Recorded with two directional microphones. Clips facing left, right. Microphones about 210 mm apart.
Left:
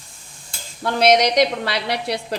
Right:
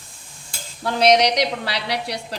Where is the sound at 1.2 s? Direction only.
50° left (ahead or behind).